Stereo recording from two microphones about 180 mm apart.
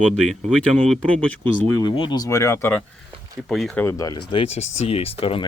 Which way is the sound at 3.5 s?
Centre (ahead or behind).